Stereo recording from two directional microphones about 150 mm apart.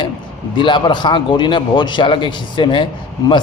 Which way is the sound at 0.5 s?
30° left (ahead or behind).